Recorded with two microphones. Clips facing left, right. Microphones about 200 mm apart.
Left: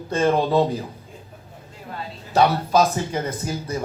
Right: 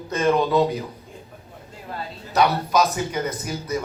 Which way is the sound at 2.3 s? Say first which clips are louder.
Left 2 dB; 30° left (ahead or behind).